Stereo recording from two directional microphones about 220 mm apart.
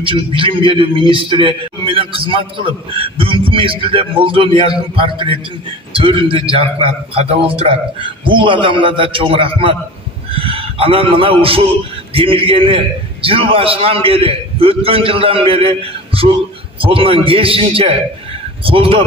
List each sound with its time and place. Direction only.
0.0 s a man's voice: 25° right (ahead or behind)